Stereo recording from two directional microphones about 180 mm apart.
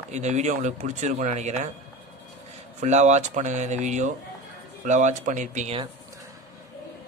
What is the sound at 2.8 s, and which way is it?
Speech, 40° right (ahead or behind).